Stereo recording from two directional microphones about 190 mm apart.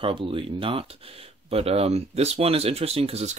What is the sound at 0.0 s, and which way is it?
Speech, 30° right (ahead or behind).